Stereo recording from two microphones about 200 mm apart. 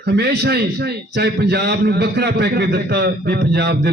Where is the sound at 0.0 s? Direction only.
55° right (ahead or behind).